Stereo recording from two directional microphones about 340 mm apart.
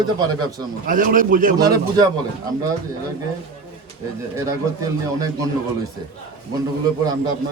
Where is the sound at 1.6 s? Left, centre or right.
Centre.